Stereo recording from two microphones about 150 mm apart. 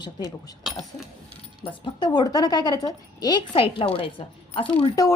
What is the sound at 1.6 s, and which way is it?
A woman's voice, 30° left (ahead or behind).